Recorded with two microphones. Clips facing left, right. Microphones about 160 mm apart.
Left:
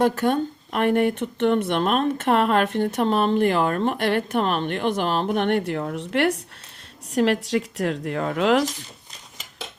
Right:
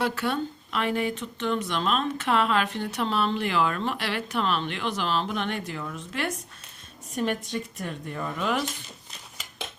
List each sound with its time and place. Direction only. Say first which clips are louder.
0.0 s speech: left 7 dB; 45° left (ahead or behind); by 6.3 s 65° left (ahead or behind)
7.1 s speech: left 8 dB; 85° left